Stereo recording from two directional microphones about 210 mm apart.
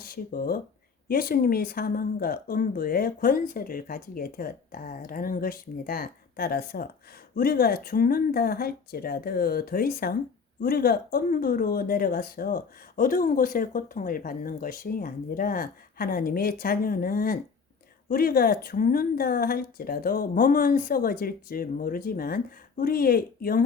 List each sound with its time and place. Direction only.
0.0 s speech: 45° left (ahead or behind)